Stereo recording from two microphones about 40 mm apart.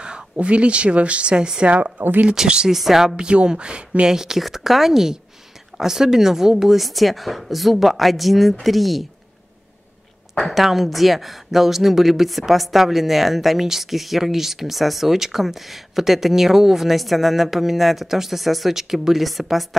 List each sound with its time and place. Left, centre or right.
0.0 s speech: right
1.7 s speech: right
2.3 s a woman's voice: centre
2.7 s a woman's voice: centre
3.2 s speech: right
4.0 s a woman's voice: centre
10.4 s a woman's voice: centre